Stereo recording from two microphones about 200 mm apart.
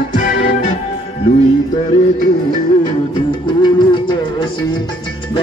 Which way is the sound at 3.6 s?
25° left (ahead or behind).